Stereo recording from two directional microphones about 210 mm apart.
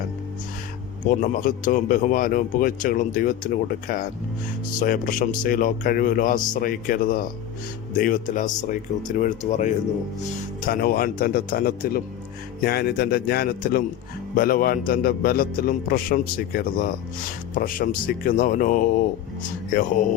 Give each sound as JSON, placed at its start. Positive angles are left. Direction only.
{"t": 1.0, "sound": "speech", "side_deg": 40}
{"t": 10.7, "sound": "a man's voice", "side_deg": 45}